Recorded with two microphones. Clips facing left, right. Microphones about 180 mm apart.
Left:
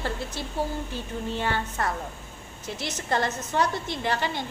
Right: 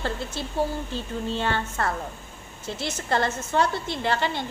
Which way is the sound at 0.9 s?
15° left (ahead or behind).